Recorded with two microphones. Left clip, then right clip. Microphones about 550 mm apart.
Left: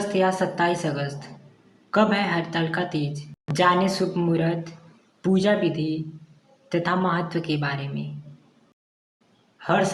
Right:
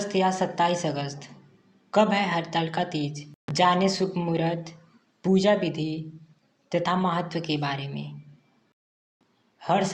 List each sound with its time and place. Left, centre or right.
0.1 s a woman's voice: left
9.6 s a man's voice: left